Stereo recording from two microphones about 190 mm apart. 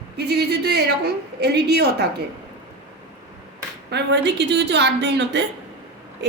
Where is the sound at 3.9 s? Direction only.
65° right (ahead or behind).